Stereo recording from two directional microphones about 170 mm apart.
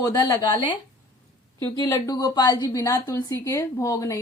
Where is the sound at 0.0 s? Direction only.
25° left (ahead or behind).